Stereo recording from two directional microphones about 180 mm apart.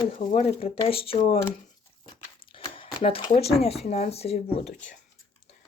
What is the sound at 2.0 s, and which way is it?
Crumpling, 30° left (ahead or behind).